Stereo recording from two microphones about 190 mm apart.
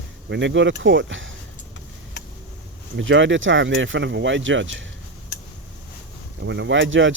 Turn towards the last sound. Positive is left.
turn(degrees=-75)  # may be behind; listen again after turning